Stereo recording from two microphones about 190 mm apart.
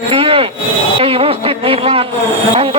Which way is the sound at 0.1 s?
30° right (ahead or behind).